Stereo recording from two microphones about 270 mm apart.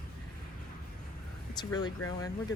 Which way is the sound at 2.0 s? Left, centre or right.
Left.